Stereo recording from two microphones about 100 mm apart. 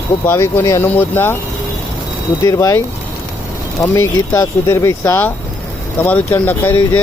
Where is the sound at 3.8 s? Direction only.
25° left (ahead or behind).